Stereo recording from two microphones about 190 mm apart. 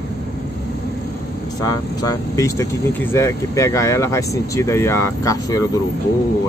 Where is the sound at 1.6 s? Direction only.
20° left (ahead or behind).